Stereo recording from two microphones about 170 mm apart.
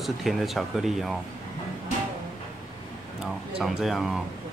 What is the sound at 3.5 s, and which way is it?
Speech, 5° right (ahead or behind).